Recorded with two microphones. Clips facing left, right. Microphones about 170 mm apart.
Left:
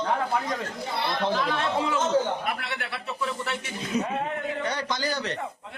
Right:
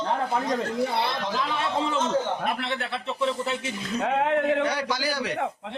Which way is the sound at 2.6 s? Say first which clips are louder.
Right 4 dB; 25° right (ahead or behind).